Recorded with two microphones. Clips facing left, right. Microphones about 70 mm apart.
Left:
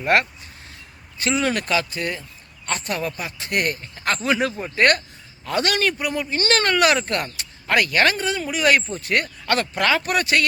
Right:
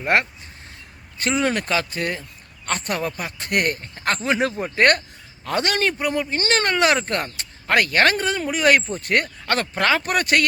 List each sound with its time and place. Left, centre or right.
0.0 s speech: right
1.3 s speech: right
4.2 s speech: right
6.4 s speech: right